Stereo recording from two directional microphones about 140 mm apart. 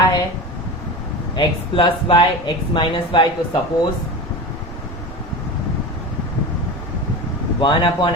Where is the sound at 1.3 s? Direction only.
35° left (ahead or behind).